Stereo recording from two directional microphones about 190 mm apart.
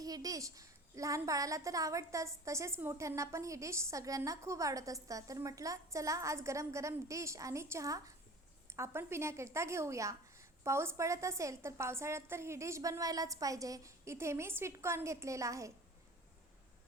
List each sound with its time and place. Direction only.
0.0 s a child's voice: 20° right (ahead or behind)